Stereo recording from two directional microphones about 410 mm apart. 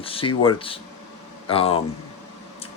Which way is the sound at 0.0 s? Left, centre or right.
Centre.